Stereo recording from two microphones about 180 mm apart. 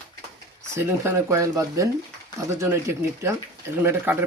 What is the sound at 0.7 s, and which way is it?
Speech, 15° right (ahead or behind).